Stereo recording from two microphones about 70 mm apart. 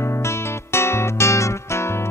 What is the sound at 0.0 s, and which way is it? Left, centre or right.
Music, left.